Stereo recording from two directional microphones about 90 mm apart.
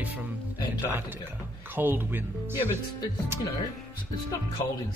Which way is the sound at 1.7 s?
25° right (ahead or behind).